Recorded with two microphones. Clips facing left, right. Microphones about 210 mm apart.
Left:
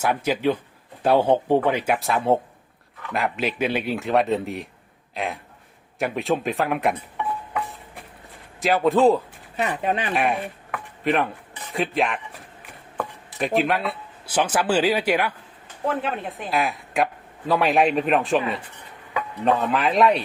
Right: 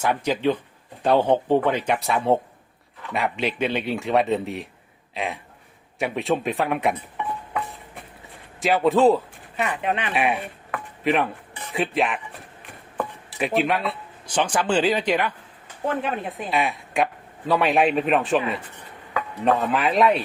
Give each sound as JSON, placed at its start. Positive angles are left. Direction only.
{"t": 0.0, "sound": "speech", "side_deg": 5}
{"t": 8.6, "sound": "a man's voice", "side_deg": 0}
{"t": 9.6, "sound": "speech", "side_deg": 40}
{"t": 10.2, "sound": "speech", "side_deg": 0}
{"t": 11.0, "sound": "dishes", "side_deg": 0}
{"t": 11.7, "sound": "speech", "side_deg": 0}